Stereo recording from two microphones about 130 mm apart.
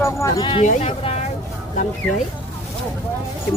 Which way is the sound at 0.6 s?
65° left (ahead or behind).